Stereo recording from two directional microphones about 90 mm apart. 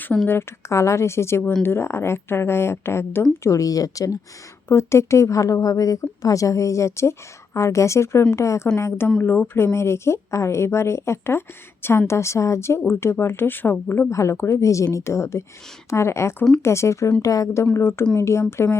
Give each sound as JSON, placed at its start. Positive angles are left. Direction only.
{"t": 0.3, "sound": "a woman's voice", "side_deg": 30}
{"t": 3.4, "sound": "a woman's voice", "side_deg": 35}
{"t": 4.7, "sound": "a woman's voice", "side_deg": 30}
{"t": 9.0, "sound": "a woman's voice", "side_deg": 20}
{"t": 14.1, "sound": "a woman's voice", "side_deg": 30}